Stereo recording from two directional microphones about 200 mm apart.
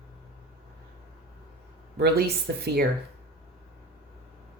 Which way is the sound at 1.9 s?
55° right (ahead or behind).